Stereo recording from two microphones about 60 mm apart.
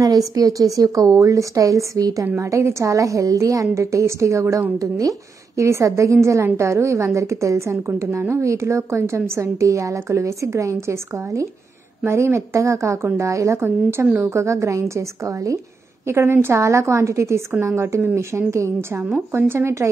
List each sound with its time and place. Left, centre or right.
0.0 s a woman's voice: right
2.4 s a woman's voice: right
4.7 s speech: right
5.6 s a woman's voice: right
9.4 s a woman's voice: right
13.6 s a woman's voice: right
14.2 s a woman's voice: right
16.1 s a woman's voice: right